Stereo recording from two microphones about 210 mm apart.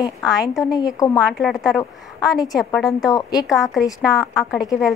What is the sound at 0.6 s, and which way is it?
Speech, 15° left (ahead or behind).